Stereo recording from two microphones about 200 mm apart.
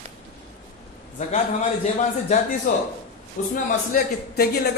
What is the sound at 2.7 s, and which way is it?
A man's voice, 40° left (ahead or behind).